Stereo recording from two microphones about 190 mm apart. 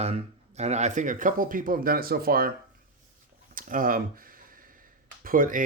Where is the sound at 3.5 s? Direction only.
45° right (ahead or behind).